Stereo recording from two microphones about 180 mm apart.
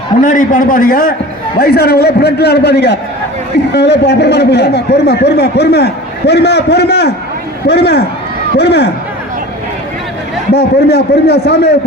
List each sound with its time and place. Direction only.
0.2 s a man's voice: 45° left (ahead or behind)
1.5 s a man's voice: 65° left (ahead or behind)
10.5 s a man's voice: 65° left (ahead or behind)